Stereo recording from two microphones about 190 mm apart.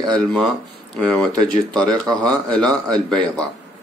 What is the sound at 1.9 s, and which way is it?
Speech, 20° right (ahead or behind).